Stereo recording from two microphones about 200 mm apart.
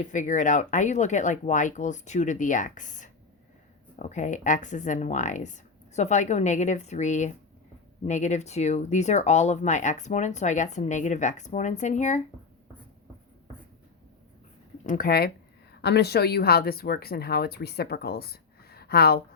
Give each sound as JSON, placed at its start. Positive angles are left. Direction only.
{"t": 0.1, "sound": "speech", "side_deg": 40}
{"t": 14.8, "sound": "speech", "side_deg": 45}